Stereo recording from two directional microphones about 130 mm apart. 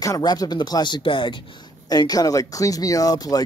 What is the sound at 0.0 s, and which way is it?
Speech, 30° left (ahead or behind).